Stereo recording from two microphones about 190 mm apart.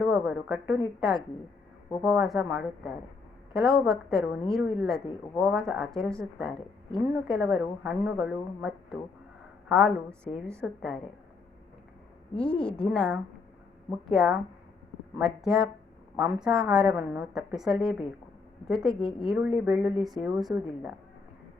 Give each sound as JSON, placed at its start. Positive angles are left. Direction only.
{"t": 0.0, "sound": "a woman's voice", "side_deg": -5}
{"t": 2.0, "sound": "a woman's voice", "side_deg": -10}
{"t": 12.4, "sound": "a woman's voice", "side_deg": 5}